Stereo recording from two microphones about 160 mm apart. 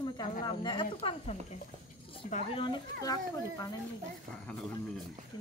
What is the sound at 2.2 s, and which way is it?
Speech, 55° left (ahead or behind).